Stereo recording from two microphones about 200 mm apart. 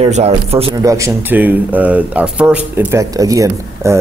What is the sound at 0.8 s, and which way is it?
Speech, 15° right (ahead or behind).